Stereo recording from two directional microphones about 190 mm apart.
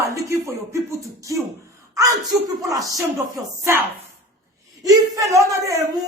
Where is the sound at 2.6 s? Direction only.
15° right (ahead or behind).